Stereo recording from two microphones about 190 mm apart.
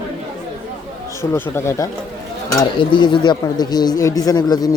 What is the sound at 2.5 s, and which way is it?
Speech, 25° left (ahead or behind).